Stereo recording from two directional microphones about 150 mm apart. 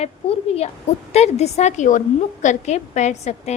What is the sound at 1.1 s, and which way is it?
A woman's voice, 45° left (ahead or behind).